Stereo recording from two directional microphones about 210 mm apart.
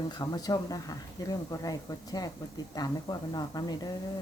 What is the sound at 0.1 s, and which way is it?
Speech, 20° left (ahead or behind).